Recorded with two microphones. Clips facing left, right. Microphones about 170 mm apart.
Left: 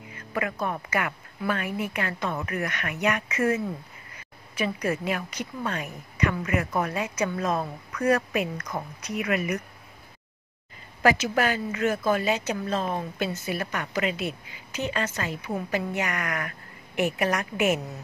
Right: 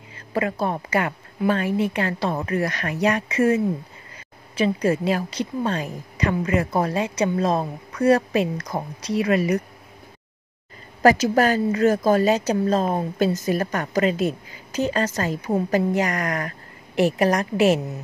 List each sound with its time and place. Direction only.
0.1 s a woman's voice: 30° right (ahead or behind)
11.0 s a woman's voice: 40° right (ahead or behind)